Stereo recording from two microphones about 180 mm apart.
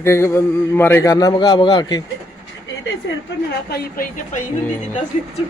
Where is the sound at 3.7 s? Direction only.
50° left (ahead or behind).